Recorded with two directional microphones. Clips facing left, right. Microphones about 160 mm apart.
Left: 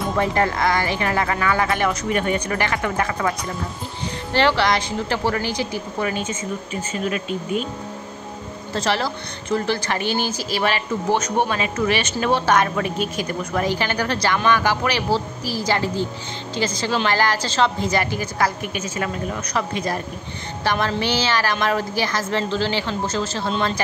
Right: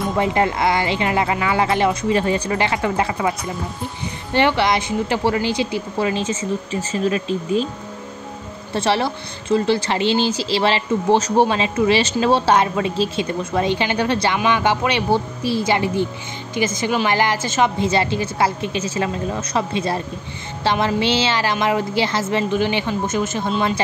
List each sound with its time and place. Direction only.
0.2 s a woman's voice: 20° right (ahead or behind)
4.3 s a woman's voice: 20° right (ahead or behind)
8.7 s a woman's voice: 25° right (ahead or behind)
16.8 s a woman's voice: 10° right (ahead or behind)
17.1 s a woman's voice: 20° right (ahead or behind)